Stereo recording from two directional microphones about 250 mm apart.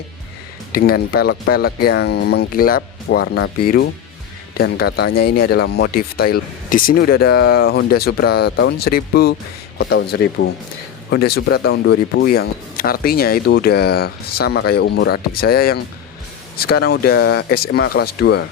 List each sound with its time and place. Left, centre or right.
0.7 s speech: left